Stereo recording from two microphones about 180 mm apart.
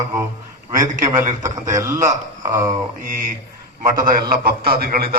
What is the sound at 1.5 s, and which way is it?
Speech, 20° right (ahead or behind).